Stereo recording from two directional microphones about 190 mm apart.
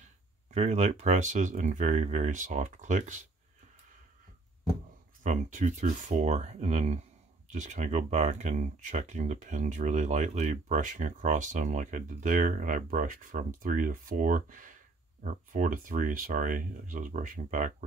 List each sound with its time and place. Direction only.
0.5 s speech: 35° right (ahead or behind)
5.2 s speech: 40° right (ahead or behind)